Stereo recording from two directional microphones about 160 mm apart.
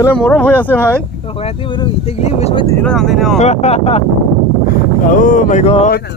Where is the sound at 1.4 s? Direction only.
35° left (ahead or behind).